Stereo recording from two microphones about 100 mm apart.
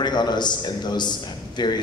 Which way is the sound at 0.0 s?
45° left (ahead or behind).